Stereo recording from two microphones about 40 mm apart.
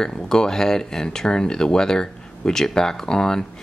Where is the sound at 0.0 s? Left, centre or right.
Centre.